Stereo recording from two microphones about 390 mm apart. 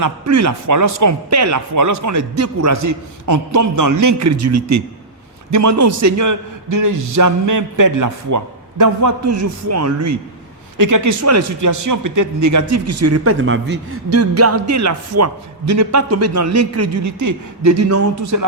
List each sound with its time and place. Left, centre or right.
0.0 s speech: right